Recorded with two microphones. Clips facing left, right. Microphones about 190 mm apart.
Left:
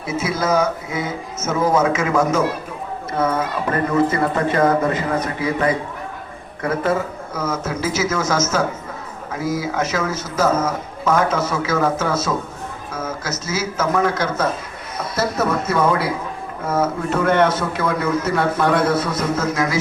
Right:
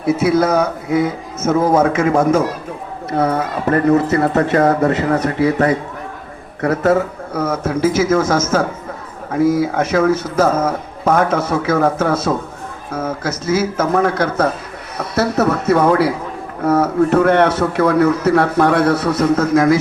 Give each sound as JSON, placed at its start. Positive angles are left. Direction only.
{"t": 0.0, "sound": "a man's voice", "side_deg": -60}
{"t": 3.2, "sound": "speech", "side_deg": -35}
{"t": 3.7, "sound": "a man's voice", "side_deg": -65}
{"t": 4.1, "sound": "speech", "side_deg": -40}
{"t": 4.8, "sound": "speech", "side_deg": -70}
{"t": 6.9, "sound": "a man's voice", "side_deg": -60}